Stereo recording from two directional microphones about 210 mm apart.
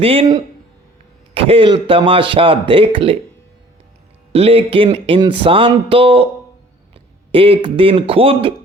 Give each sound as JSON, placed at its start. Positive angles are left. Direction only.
{"t": 0.0, "sound": "speech", "side_deg": -25}
{"t": 4.3, "sound": "speech", "side_deg": -25}